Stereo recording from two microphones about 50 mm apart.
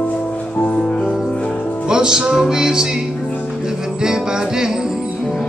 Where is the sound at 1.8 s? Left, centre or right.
Centre.